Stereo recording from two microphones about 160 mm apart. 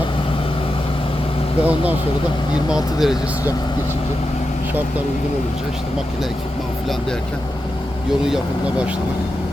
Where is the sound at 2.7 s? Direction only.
5° right (ahead or behind).